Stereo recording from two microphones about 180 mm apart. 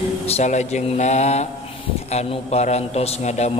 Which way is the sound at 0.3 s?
40° left (ahead or behind).